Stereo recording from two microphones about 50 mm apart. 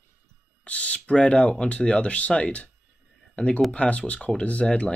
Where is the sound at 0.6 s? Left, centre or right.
Left.